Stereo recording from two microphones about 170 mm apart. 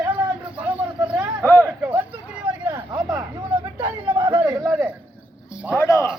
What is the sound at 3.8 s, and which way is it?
Speech, 25° right (ahead or behind).